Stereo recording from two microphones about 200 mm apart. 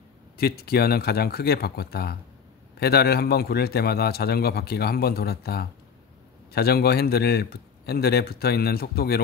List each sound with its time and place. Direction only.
0.4 s a man's voice: 50° left (ahead or behind)